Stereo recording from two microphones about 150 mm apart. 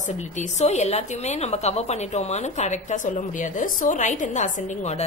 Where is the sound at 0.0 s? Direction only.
50° left (ahead or behind).